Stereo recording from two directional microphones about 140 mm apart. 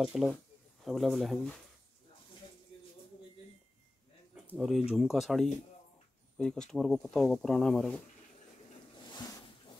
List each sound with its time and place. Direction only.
0.0 s speech: 5° right (ahead or behind)
4.5 s speech: 5° right (ahead or behind)
9.1 s a sound: 30° left (ahead or behind)